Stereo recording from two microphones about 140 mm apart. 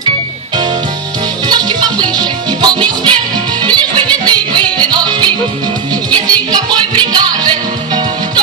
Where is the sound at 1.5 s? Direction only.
30° right (ahead or behind).